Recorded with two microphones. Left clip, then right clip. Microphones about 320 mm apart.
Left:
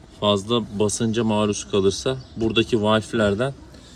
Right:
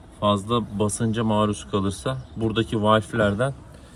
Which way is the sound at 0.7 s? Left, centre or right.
Right.